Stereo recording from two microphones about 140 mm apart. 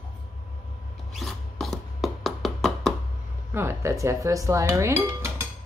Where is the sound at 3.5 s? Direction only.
20° right (ahead or behind).